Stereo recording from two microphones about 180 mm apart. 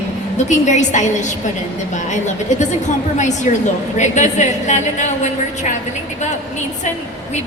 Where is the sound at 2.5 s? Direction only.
40° left (ahead or behind).